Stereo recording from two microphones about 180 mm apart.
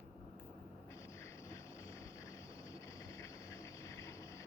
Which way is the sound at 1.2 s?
15° left (ahead or behind).